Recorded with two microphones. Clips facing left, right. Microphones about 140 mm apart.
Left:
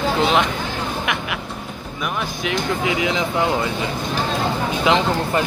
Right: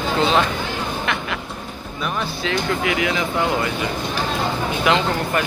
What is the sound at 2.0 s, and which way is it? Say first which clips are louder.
Speech: even; 15° left (ahead or behind).